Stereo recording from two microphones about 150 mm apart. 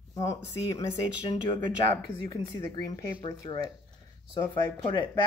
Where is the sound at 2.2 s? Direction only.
30° left (ahead or behind).